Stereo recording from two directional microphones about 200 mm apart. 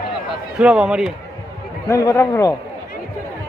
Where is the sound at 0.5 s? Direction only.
5° right (ahead or behind).